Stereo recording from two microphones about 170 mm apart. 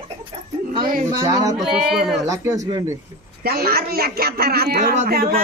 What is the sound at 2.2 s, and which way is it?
Music, 20° right (ahead or behind).